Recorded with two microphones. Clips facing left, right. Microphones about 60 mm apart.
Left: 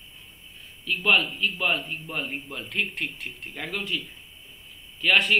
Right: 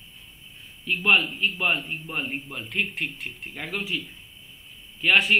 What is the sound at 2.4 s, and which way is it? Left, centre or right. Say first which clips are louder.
A man's voice: right 1 dB; centre.